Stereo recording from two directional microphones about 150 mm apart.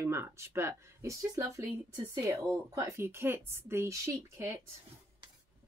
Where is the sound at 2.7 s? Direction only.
20° right (ahead or behind).